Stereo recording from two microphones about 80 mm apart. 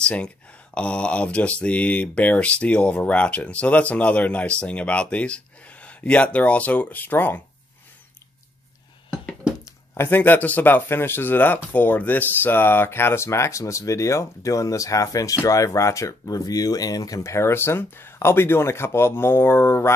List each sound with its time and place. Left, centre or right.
0.0 s speech: centre
9.9 s speech: left